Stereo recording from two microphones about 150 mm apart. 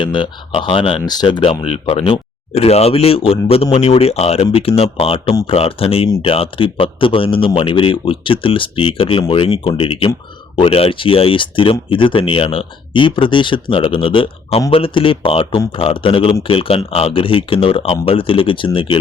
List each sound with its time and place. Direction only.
0.0 s speech: 30° left (ahead or behind)